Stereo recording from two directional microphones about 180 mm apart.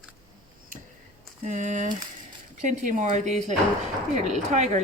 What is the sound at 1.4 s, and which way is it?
Speech, 45° right (ahead or behind).